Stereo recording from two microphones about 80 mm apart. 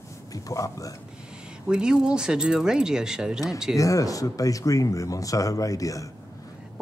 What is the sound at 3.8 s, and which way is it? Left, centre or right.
Speech, left.